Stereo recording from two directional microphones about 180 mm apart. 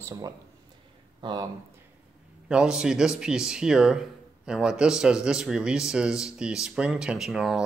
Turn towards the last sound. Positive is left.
turn(degrees=0)  # may be behind; listen again after turning